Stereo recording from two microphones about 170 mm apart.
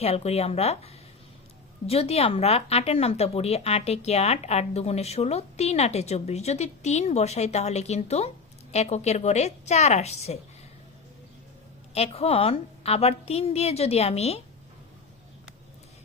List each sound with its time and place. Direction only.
0.0 s speech: 35° left (ahead or behind)
1.9 s speech: 35° left (ahead or behind)
11.9 s speech: 35° left (ahead or behind)